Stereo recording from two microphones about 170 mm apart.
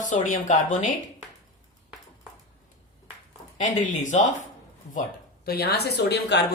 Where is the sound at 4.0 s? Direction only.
45° left (ahead or behind).